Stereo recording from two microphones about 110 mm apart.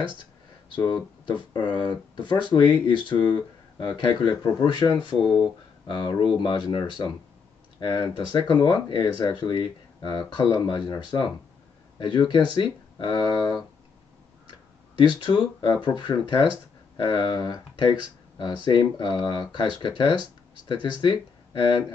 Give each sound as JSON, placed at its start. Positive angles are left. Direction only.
{"t": 0.2, "sound": "speech", "side_deg": 45}
{"t": 8.5, "sound": "speech", "side_deg": 45}
{"t": 15.0, "sound": "speech", "side_deg": 45}